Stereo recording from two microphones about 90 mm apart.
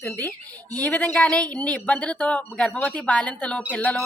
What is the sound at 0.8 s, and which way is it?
A woman's voice, 15° left (ahead or behind).